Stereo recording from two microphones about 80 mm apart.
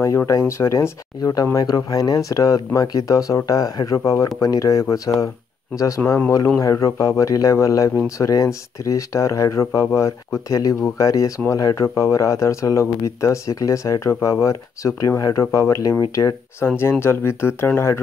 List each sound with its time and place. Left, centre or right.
0.5 s speech: left
1.3 s speech: left
16.5 s speech: left